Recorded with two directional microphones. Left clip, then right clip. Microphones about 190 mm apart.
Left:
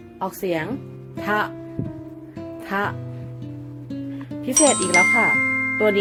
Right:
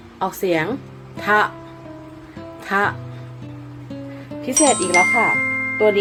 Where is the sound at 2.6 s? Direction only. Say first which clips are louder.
Right 6 dB; 15° left (ahead or behind).